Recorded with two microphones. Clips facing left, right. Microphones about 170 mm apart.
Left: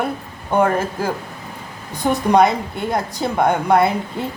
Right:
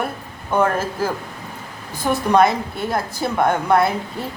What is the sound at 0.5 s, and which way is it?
Speech, 10° left (ahead or behind).